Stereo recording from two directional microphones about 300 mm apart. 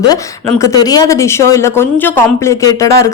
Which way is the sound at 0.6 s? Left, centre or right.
Centre.